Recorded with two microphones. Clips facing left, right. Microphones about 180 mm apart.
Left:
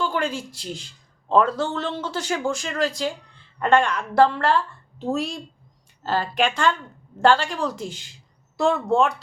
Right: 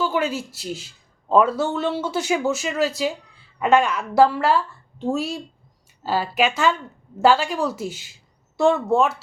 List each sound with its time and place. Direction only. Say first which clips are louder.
0.0 s speech: right 2 dB; 5° right (ahead or behind)